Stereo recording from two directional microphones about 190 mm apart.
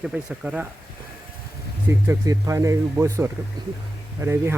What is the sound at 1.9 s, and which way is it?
Speech, 15° right (ahead or behind).